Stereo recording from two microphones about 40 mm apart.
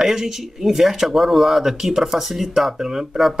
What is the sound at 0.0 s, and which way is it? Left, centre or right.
Speech, centre.